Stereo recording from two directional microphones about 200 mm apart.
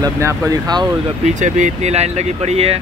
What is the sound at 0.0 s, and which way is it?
Speech, 15° right (ahead or behind).